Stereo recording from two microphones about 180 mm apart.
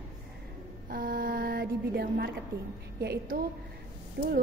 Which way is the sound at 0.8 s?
50° right (ahead or behind).